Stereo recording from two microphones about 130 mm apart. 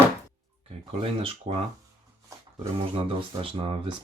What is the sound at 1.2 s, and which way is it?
Mantra, 45° right (ahead or behind).